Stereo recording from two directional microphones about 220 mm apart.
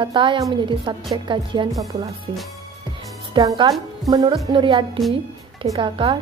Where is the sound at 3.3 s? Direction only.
20° right (ahead or behind).